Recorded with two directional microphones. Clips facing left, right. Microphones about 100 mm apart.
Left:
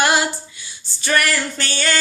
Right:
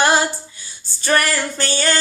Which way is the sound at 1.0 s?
30° right (ahead or behind).